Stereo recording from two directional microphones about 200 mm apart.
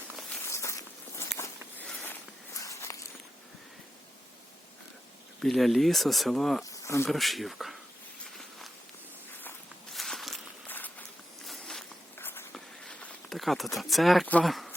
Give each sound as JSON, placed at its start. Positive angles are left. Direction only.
{"t": 0.2, "sound": "walk", "side_deg": 10}
{"t": 5.4, "sound": "speech", "side_deg": 0}
{"t": 6.7, "sound": "insect", "side_deg": 15}
{"t": 7.1, "sound": "speech", "side_deg": 0}
{"t": 9.9, "sound": "walk", "side_deg": 0}